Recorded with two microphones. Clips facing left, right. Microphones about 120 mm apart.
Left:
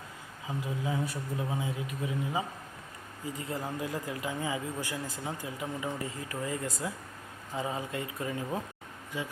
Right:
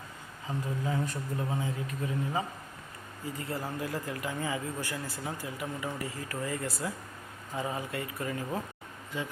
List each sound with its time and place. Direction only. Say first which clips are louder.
0.4 s a man's voice: right 1 dB; 10° left (ahead or behind)